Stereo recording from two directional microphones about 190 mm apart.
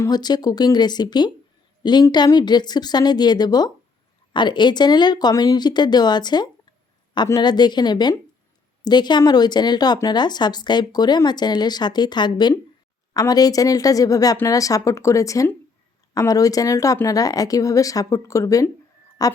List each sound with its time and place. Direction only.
0.0 s speech: 20° left (ahead or behind)